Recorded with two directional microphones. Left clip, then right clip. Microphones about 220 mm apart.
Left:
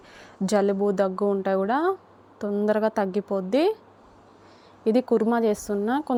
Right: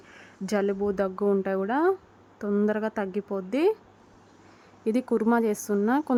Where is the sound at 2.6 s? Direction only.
5° right (ahead or behind).